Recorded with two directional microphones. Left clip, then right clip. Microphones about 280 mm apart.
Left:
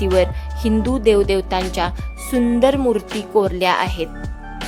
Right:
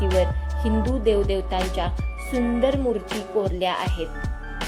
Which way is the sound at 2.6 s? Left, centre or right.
Left.